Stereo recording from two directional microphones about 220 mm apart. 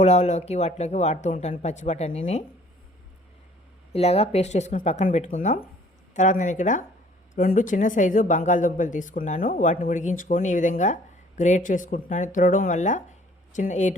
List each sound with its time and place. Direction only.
0.0 s speech: 30° left (ahead or behind)
3.9 s speech: 30° left (ahead or behind)